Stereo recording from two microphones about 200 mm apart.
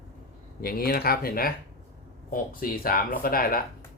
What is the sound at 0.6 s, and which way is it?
Speech, 50° left (ahead or behind).